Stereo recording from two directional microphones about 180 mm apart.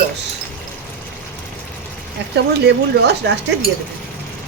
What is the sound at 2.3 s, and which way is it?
Speech, 70° right (ahead or behind).